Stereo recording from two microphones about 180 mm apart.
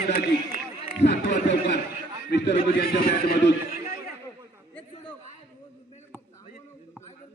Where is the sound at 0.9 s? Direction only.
70° left (ahead or behind).